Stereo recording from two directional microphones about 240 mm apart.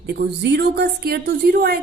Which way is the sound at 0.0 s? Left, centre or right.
Right.